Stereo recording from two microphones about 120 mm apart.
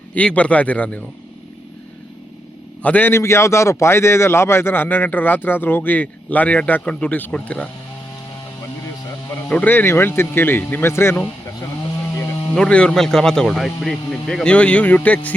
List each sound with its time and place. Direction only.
0.1 s a man's voice: 10° left (ahead or behind)
2.8 s a man's voice: 15° left (ahead or behind)
9.5 s a man's voice: 15° left (ahead or behind)
12.5 s a man's voice: 10° left (ahead or behind)